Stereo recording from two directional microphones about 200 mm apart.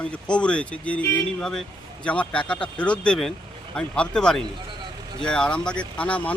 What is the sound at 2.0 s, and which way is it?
Speech, 5° left (ahead or behind).